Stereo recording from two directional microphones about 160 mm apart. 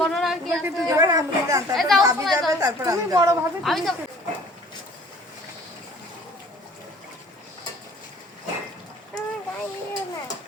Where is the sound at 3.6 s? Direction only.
Centre (ahead or behind).